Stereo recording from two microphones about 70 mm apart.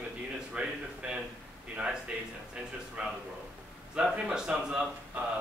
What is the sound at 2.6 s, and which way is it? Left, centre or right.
A man's voice, centre.